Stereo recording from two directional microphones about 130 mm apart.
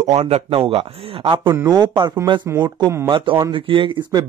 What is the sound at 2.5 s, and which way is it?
Speech, 20° right (ahead or behind).